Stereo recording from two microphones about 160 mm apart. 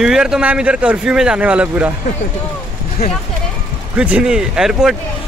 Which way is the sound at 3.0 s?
75° left (ahead or behind).